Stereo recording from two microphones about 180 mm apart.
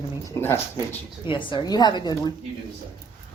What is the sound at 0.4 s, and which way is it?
Speech, 15° left (ahead or behind).